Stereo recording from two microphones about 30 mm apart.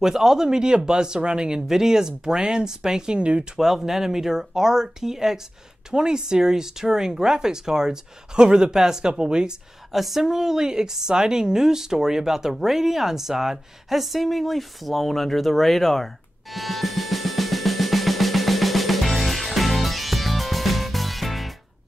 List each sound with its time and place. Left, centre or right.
0.0 s speech: centre
1.7 s speech: centre
3.2 s speech: right
3.5 s a woman's voice: centre
9.9 s a woman's voice: centre
16.5 s music: centre